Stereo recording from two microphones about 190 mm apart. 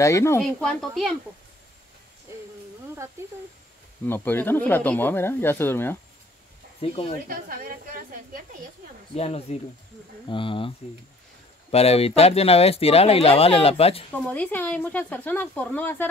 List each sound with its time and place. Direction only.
0.0 s speech: 15° left (ahead or behind)
0.4 s speech: centre (ahead or behind)
4.0 s speech: 10° left (ahead or behind)
7.2 s a woman's voice: 50° right (ahead or behind)
9.1 s speech: 35° left (ahead or behind)
11.7 s speech: 30° left (ahead or behind)
14.1 s speech: 10° left (ahead or behind)